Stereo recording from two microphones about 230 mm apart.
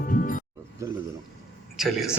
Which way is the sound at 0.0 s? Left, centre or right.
Left.